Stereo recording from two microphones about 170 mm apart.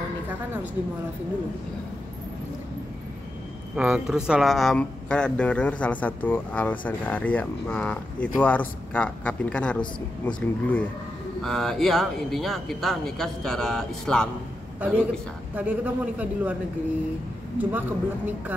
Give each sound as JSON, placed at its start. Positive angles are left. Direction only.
{"t": 3.7, "sound": "speech", "side_deg": -5}
{"t": 15.5, "sound": "a man's voice", "side_deg": -10}
{"t": 17.6, "sound": "a man's voice", "side_deg": -10}